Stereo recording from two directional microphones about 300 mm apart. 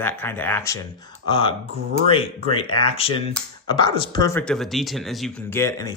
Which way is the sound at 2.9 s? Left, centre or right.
Centre.